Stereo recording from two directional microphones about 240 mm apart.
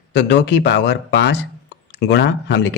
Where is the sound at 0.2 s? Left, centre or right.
Left.